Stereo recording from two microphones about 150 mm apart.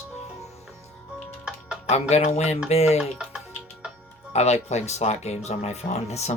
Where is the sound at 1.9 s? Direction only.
45° left (ahead or behind).